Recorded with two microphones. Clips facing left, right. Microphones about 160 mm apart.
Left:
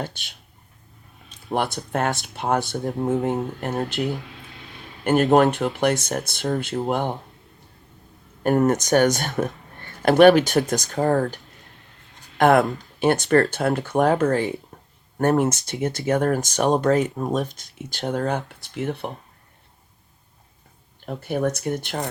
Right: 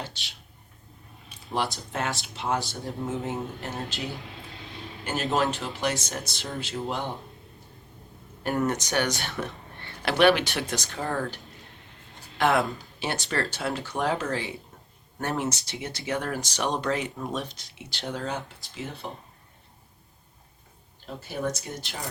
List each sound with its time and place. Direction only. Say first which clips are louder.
1.5 s speech: left 5 dB; 55° left (ahead or behind)
8.4 s speech: left 8 dB; 45° left (ahead or behind)
12.4 s speech: left 7 dB; 50° left (ahead or behind)
14.7 s a sound: left 5 dB; 55° left (ahead or behind)
15.2 s speech: left 10 dB; 50° left (ahead or behind)
21.1 s speech: left 7 dB; 60° left (ahead or behind)